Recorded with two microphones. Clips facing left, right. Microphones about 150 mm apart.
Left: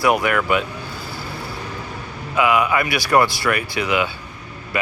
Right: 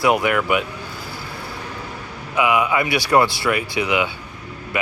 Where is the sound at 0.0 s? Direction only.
20° right (ahead or behind).